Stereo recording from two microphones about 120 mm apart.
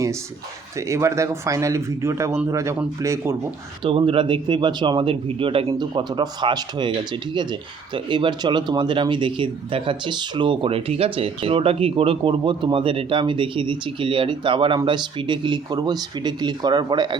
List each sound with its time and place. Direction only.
0.8 s speech: 25° right (ahead or behind)
3.8 s speech: 45° right (ahead or behind)